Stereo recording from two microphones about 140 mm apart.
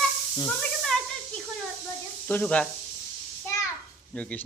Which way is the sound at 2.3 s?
10° left (ahead or behind).